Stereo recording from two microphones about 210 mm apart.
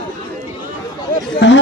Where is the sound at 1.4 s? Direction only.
55° left (ahead or behind).